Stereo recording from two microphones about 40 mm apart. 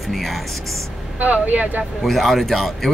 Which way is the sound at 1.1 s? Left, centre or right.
Right.